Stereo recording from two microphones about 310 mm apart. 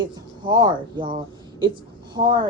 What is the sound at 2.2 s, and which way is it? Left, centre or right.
Speech, centre.